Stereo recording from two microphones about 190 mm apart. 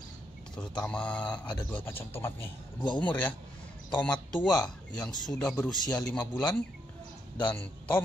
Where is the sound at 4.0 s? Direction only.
5° left (ahead or behind).